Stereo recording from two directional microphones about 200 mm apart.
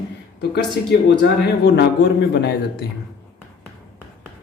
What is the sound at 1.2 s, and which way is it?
Speech, 55° left (ahead or behind).